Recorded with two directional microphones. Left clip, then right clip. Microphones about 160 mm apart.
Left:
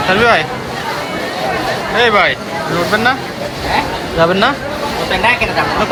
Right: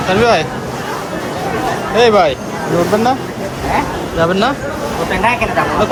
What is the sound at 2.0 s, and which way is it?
Speech, 15° right (ahead or behind).